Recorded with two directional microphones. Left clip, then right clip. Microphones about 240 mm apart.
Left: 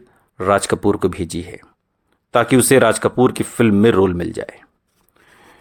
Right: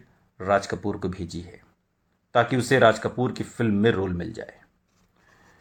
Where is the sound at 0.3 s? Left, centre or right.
Left.